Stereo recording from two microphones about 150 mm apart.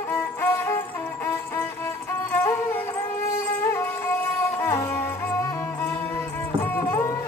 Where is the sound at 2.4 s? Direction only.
15° left (ahead or behind).